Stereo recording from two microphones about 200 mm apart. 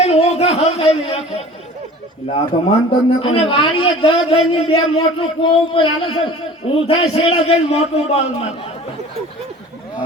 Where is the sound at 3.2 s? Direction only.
25° left (ahead or behind).